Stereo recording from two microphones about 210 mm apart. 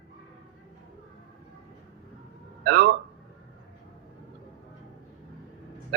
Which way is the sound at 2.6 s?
45° right (ahead or behind).